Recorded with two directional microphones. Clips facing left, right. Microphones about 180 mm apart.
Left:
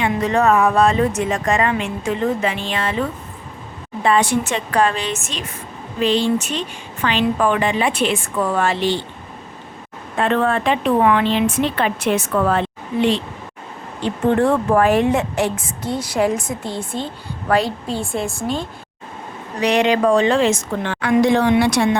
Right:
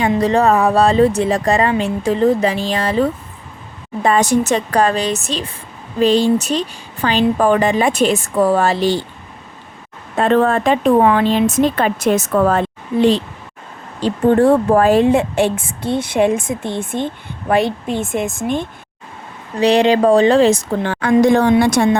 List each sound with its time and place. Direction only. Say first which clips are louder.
0.1 s speech: right 2 dB; 35° right (ahead or behind)
10.2 s a woman's voice: right 4 dB; 40° right (ahead or behind); by 18.5 s 20° right (ahead or behind)
19.5 s speech: right 4 dB; 30° right (ahead or behind); by 21.8 s 45° right (ahead or behind)